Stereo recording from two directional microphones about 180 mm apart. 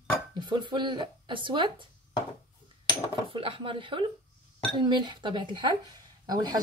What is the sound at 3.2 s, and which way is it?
Speech, 30° right (ahead or behind).